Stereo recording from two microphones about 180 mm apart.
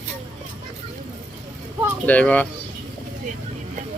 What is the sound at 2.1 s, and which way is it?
Speech, 10° left (ahead or behind).